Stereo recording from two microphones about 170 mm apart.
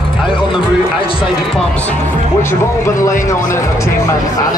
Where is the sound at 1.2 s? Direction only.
5° left (ahead or behind).